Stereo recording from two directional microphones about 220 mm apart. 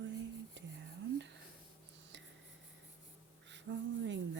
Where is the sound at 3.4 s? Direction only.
55° right (ahead or behind).